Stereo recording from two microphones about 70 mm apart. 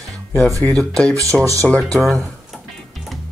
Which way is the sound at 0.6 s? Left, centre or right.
Left.